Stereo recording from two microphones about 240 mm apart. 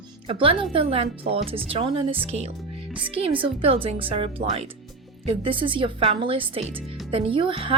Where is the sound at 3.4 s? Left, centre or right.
Right.